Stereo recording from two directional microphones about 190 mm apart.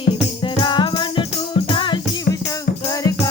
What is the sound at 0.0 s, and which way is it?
Music, 25° left (ahead or behind).